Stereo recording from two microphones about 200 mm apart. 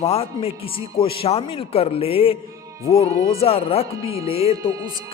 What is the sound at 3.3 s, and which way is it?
Speech, 30° left (ahead or behind).